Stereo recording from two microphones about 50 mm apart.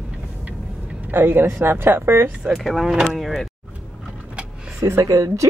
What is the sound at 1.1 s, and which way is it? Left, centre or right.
A man's voice, right.